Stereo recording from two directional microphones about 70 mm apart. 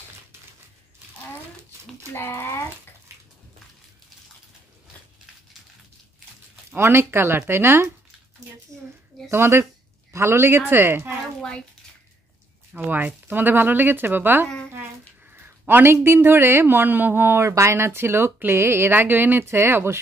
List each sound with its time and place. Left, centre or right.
2.1 s speech: left
6.7 s speech: right
9.3 s speech: right
12.8 s speech: right
17.5 s speech: right